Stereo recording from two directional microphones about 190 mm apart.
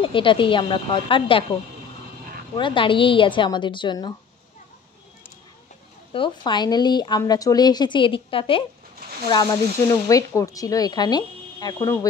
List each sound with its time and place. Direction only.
0.0 s a woman's voice: 25° left (ahead or behind)
2.5 s a woman's voice: 25° left (ahead or behind)
6.1 s a woman's voice: 25° left (ahead or behind)